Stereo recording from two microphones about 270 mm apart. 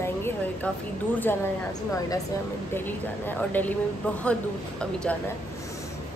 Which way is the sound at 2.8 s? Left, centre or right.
Centre.